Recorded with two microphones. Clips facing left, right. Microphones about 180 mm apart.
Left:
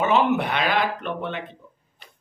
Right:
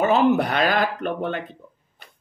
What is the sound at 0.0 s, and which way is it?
Speech, 40° right (ahead or behind).